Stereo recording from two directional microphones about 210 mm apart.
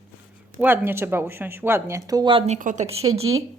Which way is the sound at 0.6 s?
10° right (ahead or behind).